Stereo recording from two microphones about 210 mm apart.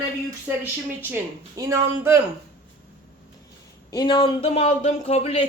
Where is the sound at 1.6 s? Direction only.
15° right (ahead or behind).